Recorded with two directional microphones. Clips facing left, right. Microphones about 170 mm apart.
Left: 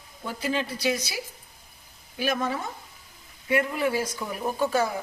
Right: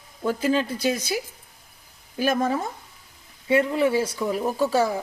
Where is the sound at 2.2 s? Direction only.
45° right (ahead or behind).